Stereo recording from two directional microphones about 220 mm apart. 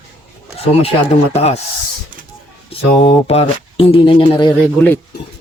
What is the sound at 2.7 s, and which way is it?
Speech, 30° left (ahead or behind).